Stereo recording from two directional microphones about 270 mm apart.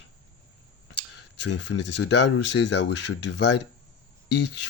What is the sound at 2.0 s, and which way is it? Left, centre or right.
Speech, left.